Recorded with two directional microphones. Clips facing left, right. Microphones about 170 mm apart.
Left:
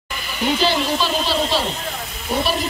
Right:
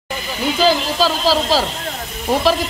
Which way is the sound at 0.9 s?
90° right.